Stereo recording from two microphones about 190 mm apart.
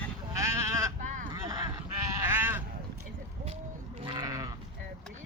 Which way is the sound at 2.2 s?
10° right (ahead or behind).